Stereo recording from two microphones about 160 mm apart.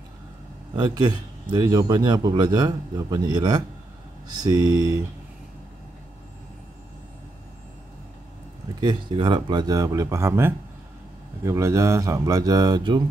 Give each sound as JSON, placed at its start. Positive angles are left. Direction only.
{"t": 0.7, "sound": "speech", "side_deg": -25}
{"t": 8.8, "sound": "speech", "side_deg": -30}